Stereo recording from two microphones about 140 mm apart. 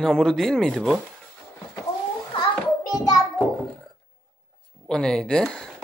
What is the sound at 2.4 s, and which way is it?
Child singing, 25° left (ahead or behind).